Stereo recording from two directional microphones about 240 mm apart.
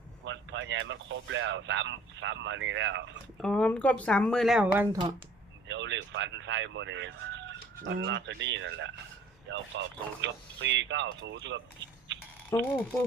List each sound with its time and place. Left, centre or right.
0.3 s speech: right
3.3 s speech: centre
5.6 s speech: right
12.1 s a sound: right
12.5 s speech: centre